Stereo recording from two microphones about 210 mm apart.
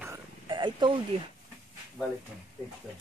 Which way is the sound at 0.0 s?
15° right (ahead or behind).